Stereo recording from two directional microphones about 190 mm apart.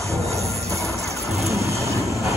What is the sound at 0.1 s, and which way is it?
Music, 15° right (ahead or behind).